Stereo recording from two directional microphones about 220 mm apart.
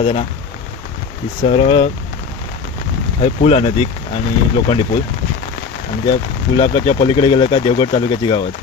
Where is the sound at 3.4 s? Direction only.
25° left (ahead or behind).